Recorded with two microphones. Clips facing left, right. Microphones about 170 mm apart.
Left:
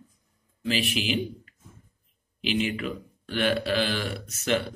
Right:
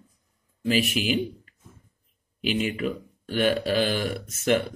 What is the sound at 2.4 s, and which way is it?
A man's voice, 45° right (ahead or behind).